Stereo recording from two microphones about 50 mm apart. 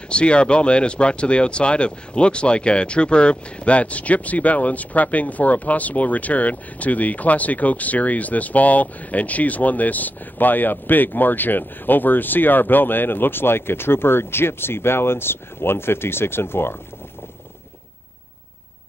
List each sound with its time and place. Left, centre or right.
0.1 s speech: left